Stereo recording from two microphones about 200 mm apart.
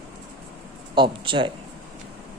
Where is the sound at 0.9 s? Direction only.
25° right (ahead or behind).